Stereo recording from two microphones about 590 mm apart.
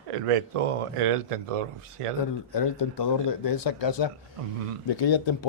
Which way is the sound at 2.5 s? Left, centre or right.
Left.